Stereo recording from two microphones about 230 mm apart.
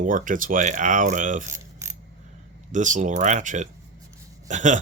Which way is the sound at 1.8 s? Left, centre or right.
Centre.